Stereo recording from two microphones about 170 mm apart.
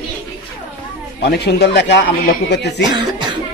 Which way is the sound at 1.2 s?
80° left.